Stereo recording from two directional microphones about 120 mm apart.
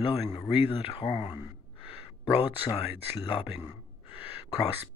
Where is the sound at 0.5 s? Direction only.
45° left (ahead or behind).